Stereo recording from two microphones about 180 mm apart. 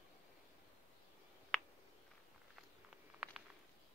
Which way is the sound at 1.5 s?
5° left (ahead or behind).